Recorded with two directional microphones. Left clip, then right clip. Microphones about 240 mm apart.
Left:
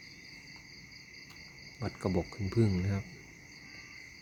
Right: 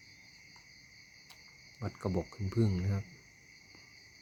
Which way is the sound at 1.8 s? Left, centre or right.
Centre.